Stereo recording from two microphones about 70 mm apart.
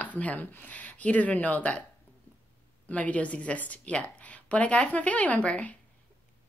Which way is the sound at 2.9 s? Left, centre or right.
Centre.